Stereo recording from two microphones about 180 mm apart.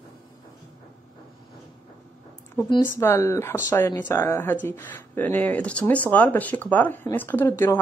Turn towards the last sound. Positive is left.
turn(degrees=15)  # may be behind; listen again after turning